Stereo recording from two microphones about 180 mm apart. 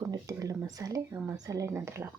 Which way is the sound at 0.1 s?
20° right (ahead or behind).